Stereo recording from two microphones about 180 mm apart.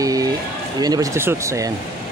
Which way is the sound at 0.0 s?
20° right (ahead or behind).